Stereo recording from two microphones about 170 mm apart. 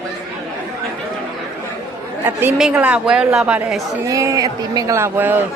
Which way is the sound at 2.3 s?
15° right (ahead or behind).